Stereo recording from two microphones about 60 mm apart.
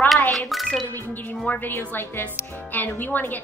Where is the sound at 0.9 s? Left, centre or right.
Left.